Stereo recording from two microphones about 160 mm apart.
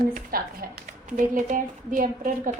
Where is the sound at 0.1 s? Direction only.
70° right (ahead or behind).